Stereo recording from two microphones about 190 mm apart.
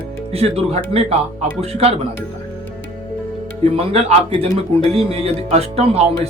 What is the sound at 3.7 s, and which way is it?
Speech, 30° right (ahead or behind).